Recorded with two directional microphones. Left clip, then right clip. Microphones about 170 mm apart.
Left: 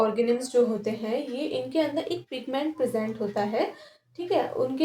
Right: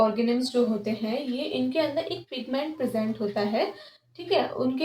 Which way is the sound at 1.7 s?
45° left (ahead or behind).